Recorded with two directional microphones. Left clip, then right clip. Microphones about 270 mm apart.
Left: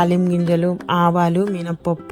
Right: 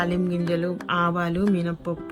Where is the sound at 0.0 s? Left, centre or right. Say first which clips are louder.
Left 7 dB; left.